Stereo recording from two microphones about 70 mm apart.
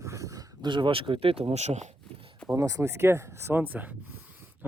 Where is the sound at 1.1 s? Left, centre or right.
Right.